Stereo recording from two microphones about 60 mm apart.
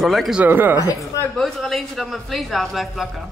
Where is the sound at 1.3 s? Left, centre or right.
Centre.